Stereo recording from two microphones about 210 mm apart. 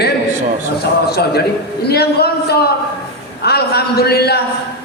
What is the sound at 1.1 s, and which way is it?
A woman's voice, 50° left (ahead or behind).